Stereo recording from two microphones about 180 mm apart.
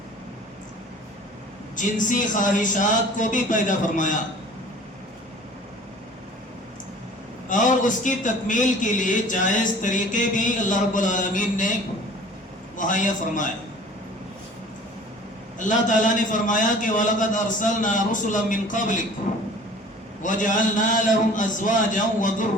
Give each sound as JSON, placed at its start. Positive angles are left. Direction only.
{"t": 1.7, "sound": "a man's voice", "side_deg": 45}
{"t": 7.4, "sound": "a man's voice", "side_deg": 45}
{"t": 12.7, "sound": "a man's voice", "side_deg": 45}
{"t": 15.5, "sound": "a man's voice", "side_deg": 45}
{"t": 20.2, "sound": "a man's voice", "side_deg": 45}